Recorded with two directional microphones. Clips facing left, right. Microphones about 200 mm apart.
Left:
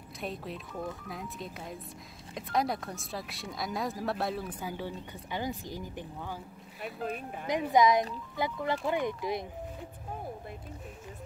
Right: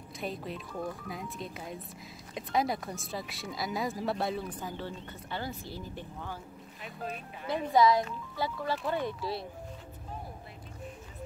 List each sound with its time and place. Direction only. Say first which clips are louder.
0.2 s speech: right 1 dB; centre (ahead or behind)
6.8 s speech: left 4 dB; 50° left (ahead or behind)
7.4 s speech: even; 15° left (ahead or behind)